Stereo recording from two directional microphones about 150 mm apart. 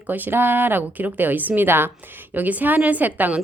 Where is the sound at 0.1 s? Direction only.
15° right (ahead or behind).